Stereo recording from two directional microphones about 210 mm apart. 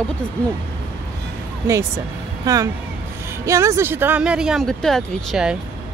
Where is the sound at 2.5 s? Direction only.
15° right (ahead or behind); by 5.5 s centre (ahead or behind).